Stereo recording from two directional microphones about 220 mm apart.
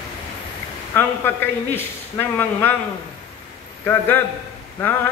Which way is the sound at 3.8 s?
10° left (ahead or behind).